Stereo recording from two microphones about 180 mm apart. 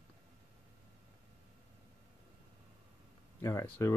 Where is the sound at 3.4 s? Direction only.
15° left (ahead or behind).